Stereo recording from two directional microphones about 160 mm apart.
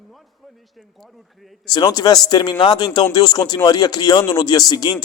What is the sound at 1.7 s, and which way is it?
A man's voice, 25° left (ahead or behind).